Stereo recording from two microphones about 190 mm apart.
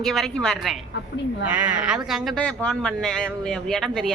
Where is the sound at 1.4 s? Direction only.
10° right (ahead or behind).